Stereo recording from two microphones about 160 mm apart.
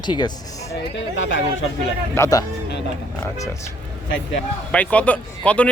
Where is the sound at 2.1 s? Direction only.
15° left (ahead or behind).